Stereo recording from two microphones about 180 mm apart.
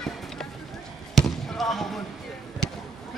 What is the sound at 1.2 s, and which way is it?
Basketball bounce, centre (ahead or behind).